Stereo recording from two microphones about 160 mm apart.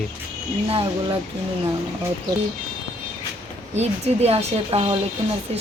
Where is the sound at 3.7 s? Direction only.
40° right (ahead or behind).